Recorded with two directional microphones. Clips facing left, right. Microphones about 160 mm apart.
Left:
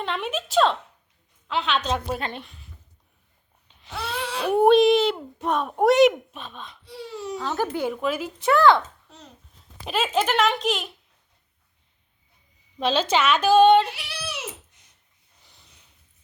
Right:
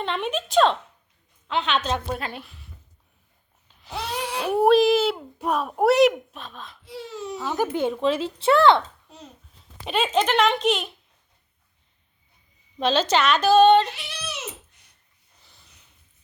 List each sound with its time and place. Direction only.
0.0 s speech: centre (ahead or behind)
4.4 s speech: 5° right (ahead or behind)
7.4 s speech: 15° right (ahead or behind)
9.8 s speech: centre (ahead or behind)
12.8 s speech: 10° left (ahead or behind)